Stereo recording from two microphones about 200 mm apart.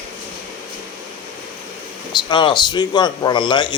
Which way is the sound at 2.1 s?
25° left (ahead or behind).